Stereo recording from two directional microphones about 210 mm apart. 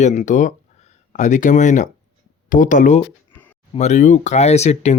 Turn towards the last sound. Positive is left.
turn(degrees=30)  # may be behind; listen again after turning